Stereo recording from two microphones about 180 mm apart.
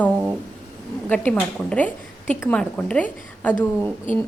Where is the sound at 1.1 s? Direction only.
10° left (ahead or behind).